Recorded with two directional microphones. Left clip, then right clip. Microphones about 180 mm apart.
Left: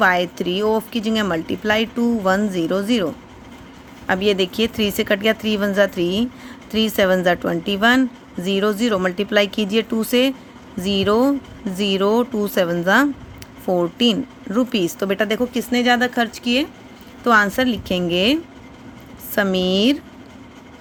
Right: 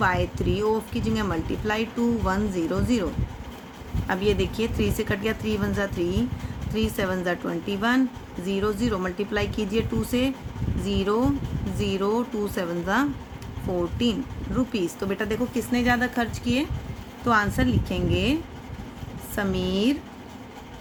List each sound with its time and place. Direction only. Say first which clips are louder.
0.0 s speech: left 7 dB; 50° left (ahead or behind)
19.4 s speech: left 8 dB; 45° left (ahead or behind)